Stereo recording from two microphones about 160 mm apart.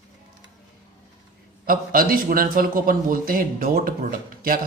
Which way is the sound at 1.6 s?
65° right (ahead or behind).